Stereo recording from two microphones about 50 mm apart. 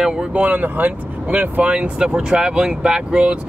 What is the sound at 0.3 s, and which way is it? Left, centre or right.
Speech, right.